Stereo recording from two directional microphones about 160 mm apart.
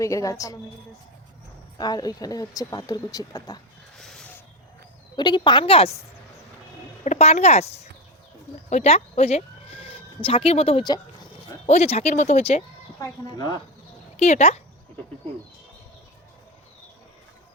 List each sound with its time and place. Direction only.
0.0 s speech: 20° left (ahead or behind)
1.8 s speech: 25° left (ahead or behind)
3.9 s a sound: 5° left (ahead or behind)
5.1 s speech: 30° left (ahead or behind)
7.0 s speech: 45° left (ahead or behind)
8.7 s sheep: 45° left (ahead or behind)
10.2 s speech: 35° left (ahead or behind)
11.6 s speech: 40° left (ahead or behind)
13.0 s speech: 25° left (ahead or behind)
14.2 s speech: 45° left (ahead or behind)